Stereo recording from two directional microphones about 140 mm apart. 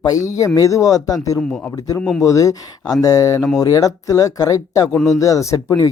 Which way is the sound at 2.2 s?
25° left (ahead or behind).